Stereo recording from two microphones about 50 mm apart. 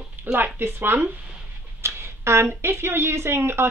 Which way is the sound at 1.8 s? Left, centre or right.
Right.